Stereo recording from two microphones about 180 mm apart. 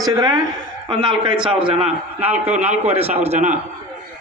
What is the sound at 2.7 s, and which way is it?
Speech, 35° right (ahead or behind).